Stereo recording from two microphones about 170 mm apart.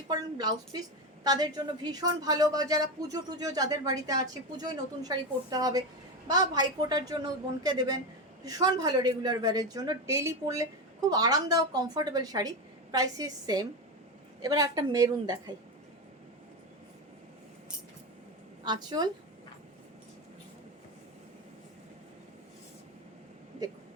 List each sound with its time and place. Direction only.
0.1 s speech: 25° right (ahead or behind)
18.6 s speech: 25° right (ahead or behind)